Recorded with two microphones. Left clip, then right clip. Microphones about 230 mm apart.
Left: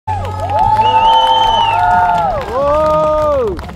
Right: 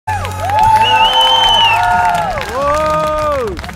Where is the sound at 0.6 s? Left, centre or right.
Right.